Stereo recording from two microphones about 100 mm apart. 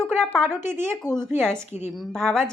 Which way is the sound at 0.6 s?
25° right (ahead or behind).